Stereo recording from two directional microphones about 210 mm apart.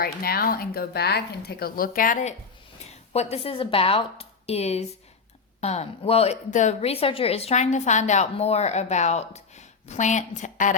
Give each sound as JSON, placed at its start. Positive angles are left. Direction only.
{"t": 0.0, "sound": "a woman's voice", "side_deg": 45}